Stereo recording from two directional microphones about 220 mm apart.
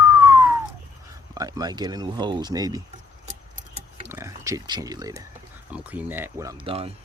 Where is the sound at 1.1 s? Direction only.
15° right (ahead or behind).